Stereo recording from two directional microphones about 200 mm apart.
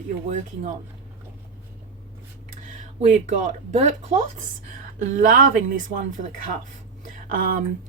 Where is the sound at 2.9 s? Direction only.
35° right (ahead or behind).